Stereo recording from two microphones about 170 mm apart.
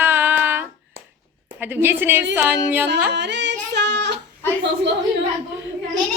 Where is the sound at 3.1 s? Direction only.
90° right.